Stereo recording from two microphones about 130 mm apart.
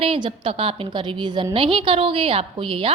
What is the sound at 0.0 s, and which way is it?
A woman's voice, 45° right (ahead or behind).